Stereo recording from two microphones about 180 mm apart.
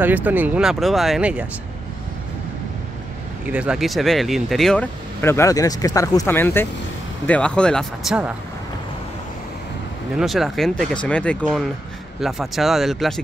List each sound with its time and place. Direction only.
0.0 s speech: 10° right (ahead or behind)
3.4 s speech: 5° right (ahead or behind)
5.2 s speech: 15° left (ahead or behind); by 8.3 s centre (ahead or behind)
10.1 s speech: centre (ahead or behind)